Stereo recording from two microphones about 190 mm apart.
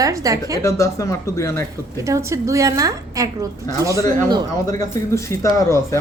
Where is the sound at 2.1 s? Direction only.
15° right (ahead or behind).